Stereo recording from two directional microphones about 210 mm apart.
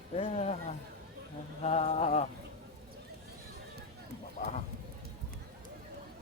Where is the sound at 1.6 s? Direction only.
30° left (ahead or behind).